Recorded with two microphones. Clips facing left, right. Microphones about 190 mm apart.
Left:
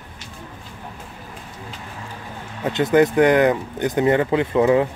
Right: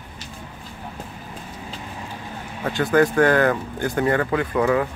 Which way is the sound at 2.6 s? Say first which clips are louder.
Left 2 dB; 20° left (ahead or behind).